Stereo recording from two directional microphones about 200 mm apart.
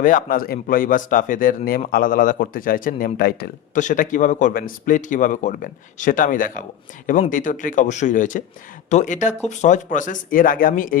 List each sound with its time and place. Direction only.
0.0 s a man's voice: 40° left (ahead or behind)